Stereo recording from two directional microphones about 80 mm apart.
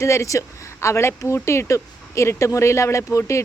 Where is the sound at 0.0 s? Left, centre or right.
Left.